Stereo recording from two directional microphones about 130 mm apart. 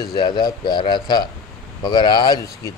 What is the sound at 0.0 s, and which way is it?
Speech, 35° left (ahead or behind).